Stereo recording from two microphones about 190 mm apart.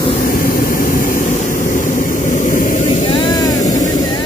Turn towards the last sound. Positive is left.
turn(degrees=20)  # may be behind; listen again after turning